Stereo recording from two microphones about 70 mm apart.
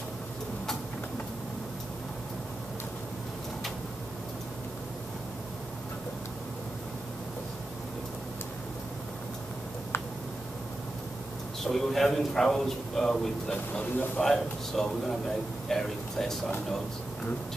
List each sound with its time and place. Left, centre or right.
11.6 s a man's voice: centre
13.5 s speech: left
14.2 s a man's voice: centre